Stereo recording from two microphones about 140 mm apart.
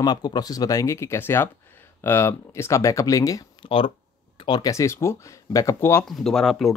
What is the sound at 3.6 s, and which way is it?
Speech, 40° left (ahead or behind).